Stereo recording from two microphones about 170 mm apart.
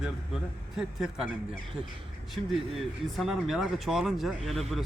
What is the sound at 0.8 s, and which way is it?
Speech, 5° right (ahead or behind).